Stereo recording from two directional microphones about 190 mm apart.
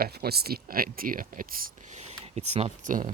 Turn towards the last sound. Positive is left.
turn(degrees=-45)  # may be behind; listen again after turning